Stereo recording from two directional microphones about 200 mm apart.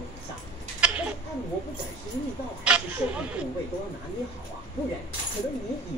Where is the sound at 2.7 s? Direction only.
5° right (ahead or behind).